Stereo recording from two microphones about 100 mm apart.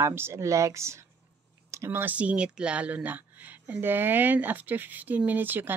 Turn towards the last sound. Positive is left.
turn(degrees=-20)  # may be behind; listen again after turning